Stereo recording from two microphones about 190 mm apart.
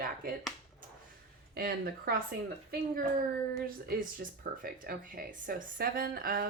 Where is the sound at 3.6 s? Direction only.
50° right (ahead or behind).